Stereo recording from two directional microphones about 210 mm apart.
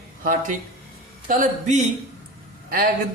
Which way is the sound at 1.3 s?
40° right (ahead or behind).